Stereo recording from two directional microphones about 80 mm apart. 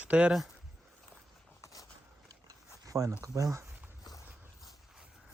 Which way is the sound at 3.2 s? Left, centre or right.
Right.